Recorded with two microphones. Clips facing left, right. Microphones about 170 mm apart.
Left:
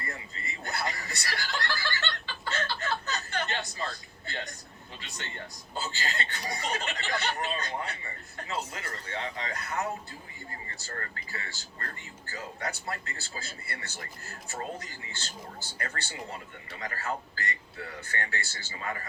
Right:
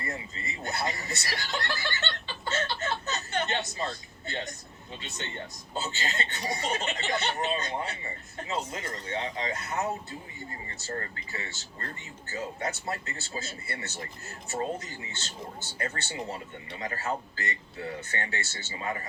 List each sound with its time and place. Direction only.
0.0 s speech: 20° right (ahead or behind)